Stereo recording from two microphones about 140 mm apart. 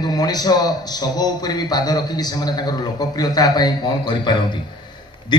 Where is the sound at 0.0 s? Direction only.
30° left (ahead or behind).